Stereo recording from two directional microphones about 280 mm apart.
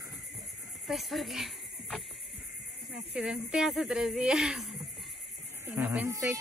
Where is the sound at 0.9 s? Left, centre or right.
Centre.